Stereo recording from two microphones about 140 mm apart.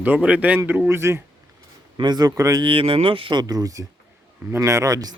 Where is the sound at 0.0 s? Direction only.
10° right (ahead or behind).